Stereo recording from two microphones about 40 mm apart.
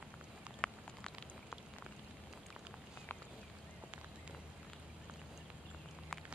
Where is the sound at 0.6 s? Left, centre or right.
Left.